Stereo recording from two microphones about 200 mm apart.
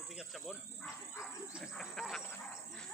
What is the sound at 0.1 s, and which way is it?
Speech, 5° right (ahead or behind).